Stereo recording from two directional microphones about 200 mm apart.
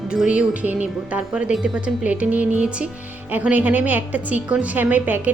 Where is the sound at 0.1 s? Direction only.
5° right (ahead or behind).